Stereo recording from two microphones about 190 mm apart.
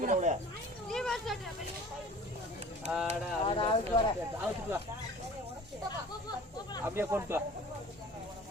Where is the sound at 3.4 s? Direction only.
25° left (ahead or behind).